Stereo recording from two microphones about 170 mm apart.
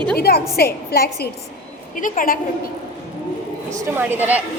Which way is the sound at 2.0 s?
50° left (ahead or behind).